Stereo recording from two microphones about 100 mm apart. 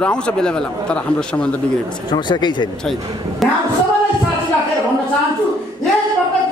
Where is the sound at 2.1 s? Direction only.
50° left (ahead or behind).